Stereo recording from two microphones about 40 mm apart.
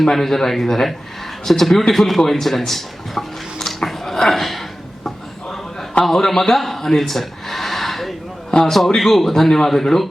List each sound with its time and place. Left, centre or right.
0.0 s speech: centre
1.9 s a sound: centre
6.1 s speech: centre
8.4 s a man's voice: centre
8.7 s speech: centre